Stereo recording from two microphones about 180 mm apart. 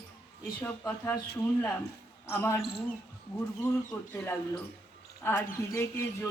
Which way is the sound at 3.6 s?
15° left (ahead or behind).